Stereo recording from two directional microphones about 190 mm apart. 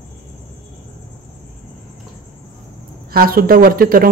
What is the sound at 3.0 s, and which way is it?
Speech, 50° right (ahead or behind).